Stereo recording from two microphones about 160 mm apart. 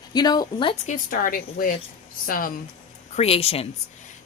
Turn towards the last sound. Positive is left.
turn(degrees=40)  # may be behind; listen again after turning